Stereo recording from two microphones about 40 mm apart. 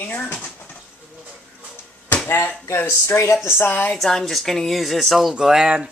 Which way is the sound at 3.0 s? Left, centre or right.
Left.